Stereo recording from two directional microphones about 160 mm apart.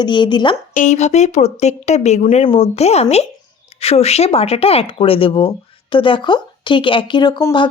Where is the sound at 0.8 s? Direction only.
50° left (ahead or behind).